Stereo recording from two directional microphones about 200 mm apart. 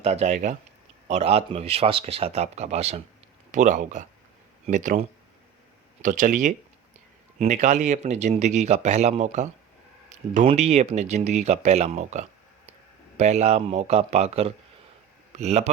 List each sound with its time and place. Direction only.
0.0 s speech: 35° right (ahead or behind)